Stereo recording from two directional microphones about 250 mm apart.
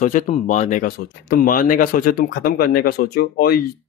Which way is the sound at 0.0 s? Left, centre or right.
Left.